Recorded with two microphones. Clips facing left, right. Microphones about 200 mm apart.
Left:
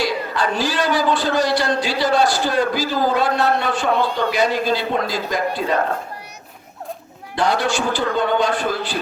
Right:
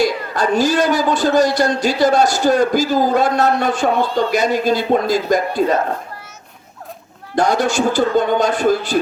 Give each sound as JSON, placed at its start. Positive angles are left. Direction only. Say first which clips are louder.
{"t": 0.0, "sound": "a man's voice", "louder": "right 4 dB", "side_deg": -45}
{"t": 7.3, "sound": "a man's voice", "louder": "right 4 dB", "side_deg": -45}